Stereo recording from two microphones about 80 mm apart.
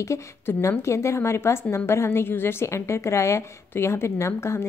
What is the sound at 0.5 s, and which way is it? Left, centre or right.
A woman's voice, left.